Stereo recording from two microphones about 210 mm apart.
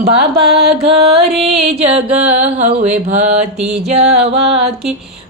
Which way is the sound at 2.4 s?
35° right (ahead or behind).